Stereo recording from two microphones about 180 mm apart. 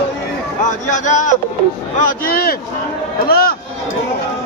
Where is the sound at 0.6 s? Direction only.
45° left (ahead or behind).